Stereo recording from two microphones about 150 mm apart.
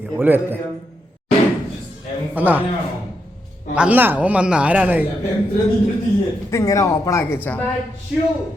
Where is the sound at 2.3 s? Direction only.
10° right (ahead or behind).